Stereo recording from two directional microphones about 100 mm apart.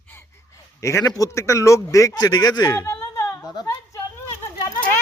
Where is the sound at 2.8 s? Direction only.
30° left (ahead or behind).